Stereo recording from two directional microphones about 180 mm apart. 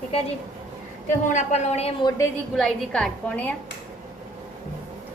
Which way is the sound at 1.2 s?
40° left (ahead or behind).